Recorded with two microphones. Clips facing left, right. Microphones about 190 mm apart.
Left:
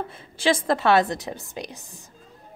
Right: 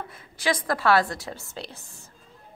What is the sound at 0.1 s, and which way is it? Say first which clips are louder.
A woman's voice: left 4 dB; 25° left (ahead or behind).